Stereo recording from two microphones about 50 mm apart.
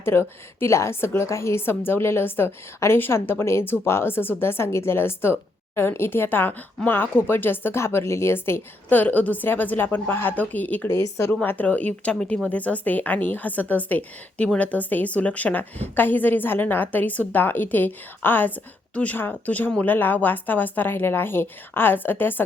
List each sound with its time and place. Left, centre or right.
0.0 s a woman's voice: left
7.8 s a woman's voice: left
9.0 s a woman's voice: left
10.8 s a woman's voice: left
11.4 s a woman's voice: left